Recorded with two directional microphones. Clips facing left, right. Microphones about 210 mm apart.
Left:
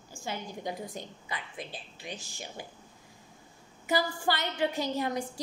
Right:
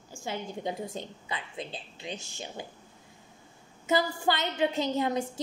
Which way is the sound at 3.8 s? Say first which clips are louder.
Right 2 dB; 20° right (ahead or behind).